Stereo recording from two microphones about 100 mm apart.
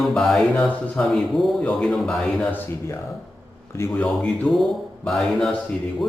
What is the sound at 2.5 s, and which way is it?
Speech, 20° left (ahead or behind).